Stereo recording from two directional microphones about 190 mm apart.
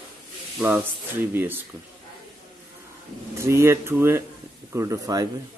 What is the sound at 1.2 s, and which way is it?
Speech, 10° right (ahead or behind).